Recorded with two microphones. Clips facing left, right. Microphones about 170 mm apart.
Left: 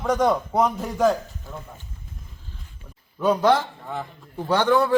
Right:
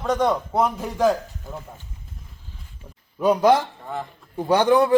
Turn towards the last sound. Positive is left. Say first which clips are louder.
# right 3 dB
turn(degrees=-15)  # may be behind; listen again after turning